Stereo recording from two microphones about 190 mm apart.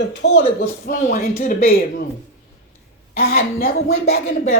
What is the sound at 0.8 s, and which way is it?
Speech, 45° left (ahead or behind).